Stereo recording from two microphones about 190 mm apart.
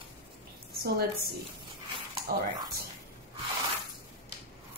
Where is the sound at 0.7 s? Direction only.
55° right (ahead or behind).